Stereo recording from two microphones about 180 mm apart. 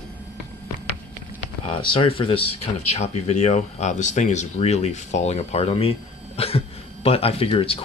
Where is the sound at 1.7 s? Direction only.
30° left (ahead or behind).